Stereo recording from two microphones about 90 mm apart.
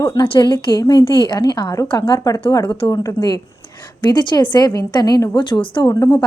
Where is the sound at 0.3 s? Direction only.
55° left (ahead or behind).